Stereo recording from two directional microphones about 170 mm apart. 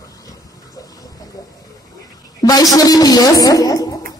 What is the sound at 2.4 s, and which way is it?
A woman's voice, 20° left (ahead or behind).